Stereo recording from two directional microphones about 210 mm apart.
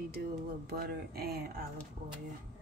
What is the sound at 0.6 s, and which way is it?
Speech, 45° right (ahead or behind).